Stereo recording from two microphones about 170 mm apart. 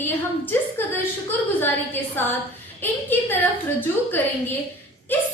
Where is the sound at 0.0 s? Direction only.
10° left (ahead or behind).